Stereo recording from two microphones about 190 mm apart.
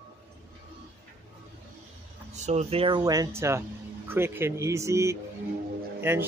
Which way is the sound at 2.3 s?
35° right (ahead or behind).